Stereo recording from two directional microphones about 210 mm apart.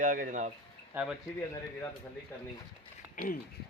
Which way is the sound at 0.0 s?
40° right (ahead or behind).